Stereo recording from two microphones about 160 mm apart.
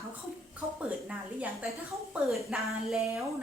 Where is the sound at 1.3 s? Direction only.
10° right (ahead or behind).